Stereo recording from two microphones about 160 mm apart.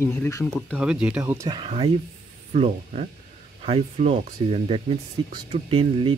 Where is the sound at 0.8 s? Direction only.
5° right (ahead or behind).